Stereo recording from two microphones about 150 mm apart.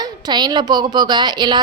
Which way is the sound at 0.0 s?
30° right (ahead or behind).